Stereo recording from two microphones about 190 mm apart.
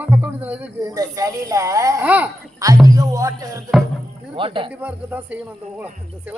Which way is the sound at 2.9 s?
20° right (ahead or behind).